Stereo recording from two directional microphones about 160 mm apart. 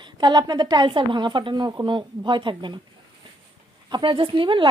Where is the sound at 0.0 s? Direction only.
25° right (ahead or behind).